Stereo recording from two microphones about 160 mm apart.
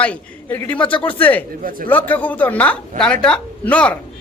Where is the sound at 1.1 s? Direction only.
10° left (ahead or behind).